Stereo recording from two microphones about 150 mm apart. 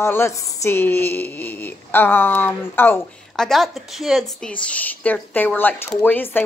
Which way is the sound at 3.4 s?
Centre (ahead or behind).